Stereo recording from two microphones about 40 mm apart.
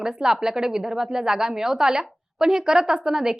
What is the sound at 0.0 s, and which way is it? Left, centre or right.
A woman's voice, centre.